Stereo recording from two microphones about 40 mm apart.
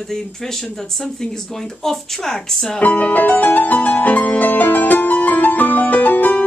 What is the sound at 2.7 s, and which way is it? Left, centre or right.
Music, left.